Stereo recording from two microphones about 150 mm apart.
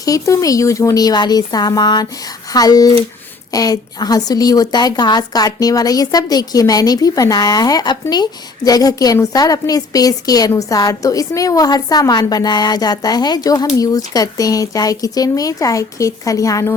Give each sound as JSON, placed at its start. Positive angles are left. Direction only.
{"t": 0.0, "sound": "a woman's voice", "side_deg": 25}